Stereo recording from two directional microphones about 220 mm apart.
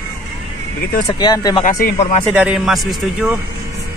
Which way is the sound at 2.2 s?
5° right (ahead or behind).